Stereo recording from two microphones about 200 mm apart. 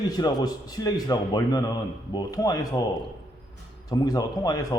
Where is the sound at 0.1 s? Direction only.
20° left (ahead or behind).